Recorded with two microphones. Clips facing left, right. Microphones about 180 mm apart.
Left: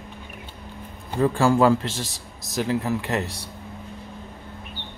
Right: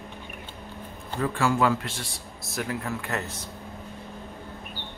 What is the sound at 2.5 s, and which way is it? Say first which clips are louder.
Speech: left 7 dB; 20° left (ahead or behind).